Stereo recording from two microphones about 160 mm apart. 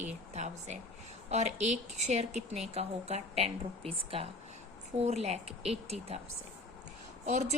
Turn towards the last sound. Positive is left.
turn(degrees=-45)  # may be behind; listen again after turning